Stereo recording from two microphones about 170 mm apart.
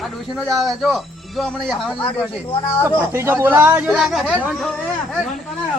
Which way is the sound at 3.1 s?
15° right (ahead or behind).